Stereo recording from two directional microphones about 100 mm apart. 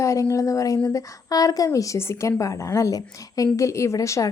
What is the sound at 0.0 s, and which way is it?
A woman's voice, 30° left (ahead or behind).